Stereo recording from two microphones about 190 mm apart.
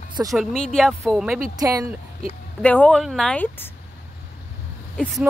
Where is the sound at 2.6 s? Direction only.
5° left (ahead or behind).